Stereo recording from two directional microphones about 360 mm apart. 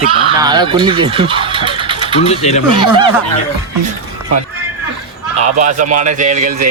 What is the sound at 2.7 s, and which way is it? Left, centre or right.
Speech, centre.